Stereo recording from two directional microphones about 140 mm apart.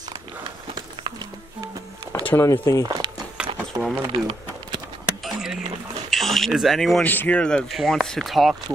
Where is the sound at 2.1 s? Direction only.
15° left (ahead or behind).